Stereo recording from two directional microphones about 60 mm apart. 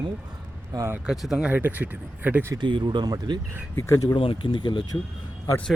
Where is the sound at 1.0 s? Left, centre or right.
Centre.